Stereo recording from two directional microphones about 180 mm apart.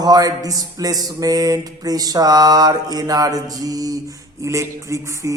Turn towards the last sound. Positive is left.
turn(degrees=-15)  # may be behind; listen again after turning